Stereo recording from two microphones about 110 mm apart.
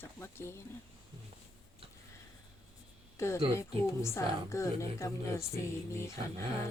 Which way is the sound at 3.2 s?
25° left (ahead or behind).